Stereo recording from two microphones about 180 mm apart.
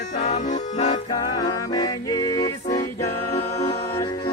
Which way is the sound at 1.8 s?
25° left (ahead or behind).